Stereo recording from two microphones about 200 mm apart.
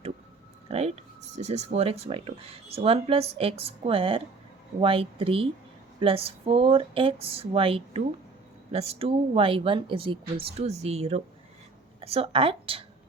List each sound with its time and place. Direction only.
0.7 s a woman's voice: 30° right (ahead or behind)